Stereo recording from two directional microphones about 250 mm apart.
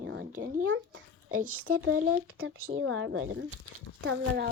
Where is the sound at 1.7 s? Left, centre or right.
Right.